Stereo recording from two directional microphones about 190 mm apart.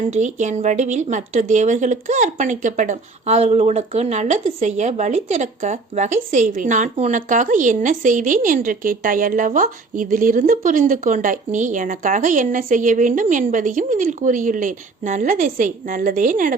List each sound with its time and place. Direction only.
0.1 s a woman's voice: 40° right (ahead or behind)